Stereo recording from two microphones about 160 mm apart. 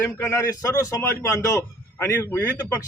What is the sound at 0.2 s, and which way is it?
A man's voice, 20° left (ahead or behind).